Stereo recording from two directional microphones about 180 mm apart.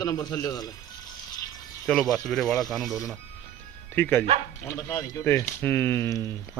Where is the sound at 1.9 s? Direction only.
Centre (ahead or behind); by 6.3 s 20° left (ahead or behind).